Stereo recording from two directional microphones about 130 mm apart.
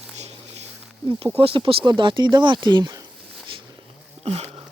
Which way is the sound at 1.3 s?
45° right (ahead or behind).